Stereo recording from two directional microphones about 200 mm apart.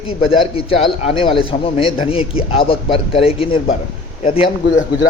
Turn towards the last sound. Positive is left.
turn(degrees=25)  # may be behind; listen again after turning